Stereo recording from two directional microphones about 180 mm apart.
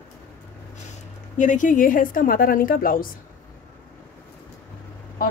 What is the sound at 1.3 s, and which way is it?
A woman's voice, 45° left (ahead or behind).